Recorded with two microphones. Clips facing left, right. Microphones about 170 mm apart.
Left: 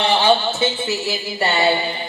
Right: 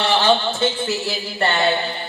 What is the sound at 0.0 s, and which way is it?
Speech, 10° left (ahead or behind).